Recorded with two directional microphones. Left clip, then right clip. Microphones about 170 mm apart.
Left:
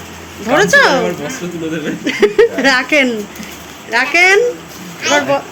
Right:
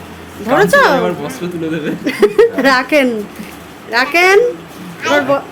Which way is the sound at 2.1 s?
10° right (ahead or behind).